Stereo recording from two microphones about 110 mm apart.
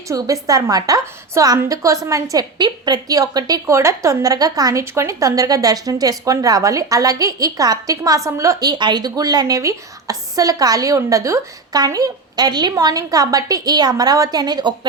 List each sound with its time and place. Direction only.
0.1 s a woman's voice: 30° right (ahead or behind)